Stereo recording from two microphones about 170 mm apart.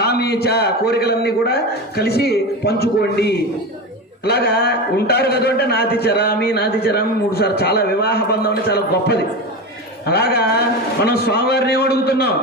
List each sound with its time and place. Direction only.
0.0 s a man's voice: 70° left (ahead or behind)